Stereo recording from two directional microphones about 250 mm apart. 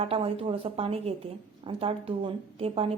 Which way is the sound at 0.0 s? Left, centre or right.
Right.